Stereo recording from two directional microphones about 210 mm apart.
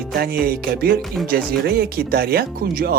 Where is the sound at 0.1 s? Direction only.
50° right (ahead or behind).